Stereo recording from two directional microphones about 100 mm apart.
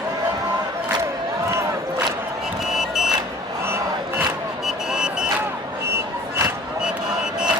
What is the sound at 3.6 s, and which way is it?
Battle cry, 25° right (ahead or behind).